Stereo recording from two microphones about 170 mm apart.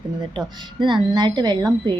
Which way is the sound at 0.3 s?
25° right (ahead or behind).